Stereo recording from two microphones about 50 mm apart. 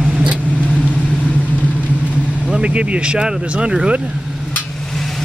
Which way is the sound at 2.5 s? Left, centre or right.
Right.